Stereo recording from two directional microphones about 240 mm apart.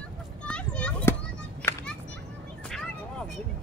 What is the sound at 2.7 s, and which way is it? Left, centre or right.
Vehicle, centre.